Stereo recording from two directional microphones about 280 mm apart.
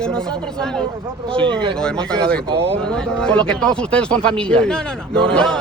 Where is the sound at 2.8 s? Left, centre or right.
Centre.